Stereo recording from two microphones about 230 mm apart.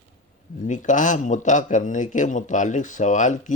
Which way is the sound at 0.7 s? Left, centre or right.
Left.